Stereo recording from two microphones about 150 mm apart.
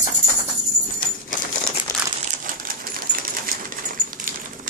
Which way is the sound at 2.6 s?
70° right (ahead or behind).